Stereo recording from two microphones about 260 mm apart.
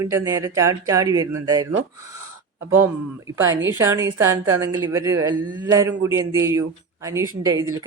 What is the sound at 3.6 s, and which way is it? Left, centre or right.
A woman's voice, centre.